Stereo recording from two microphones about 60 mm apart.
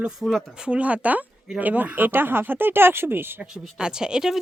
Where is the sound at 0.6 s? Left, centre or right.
Centre; by 3.2 s right.